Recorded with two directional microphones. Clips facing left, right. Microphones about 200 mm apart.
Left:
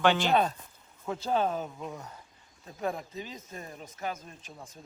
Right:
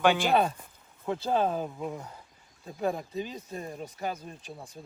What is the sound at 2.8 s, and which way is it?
Speech, 30° right (ahead or behind).